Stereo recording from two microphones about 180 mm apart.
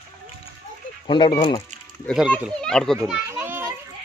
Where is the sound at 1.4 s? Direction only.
25° left (ahead or behind).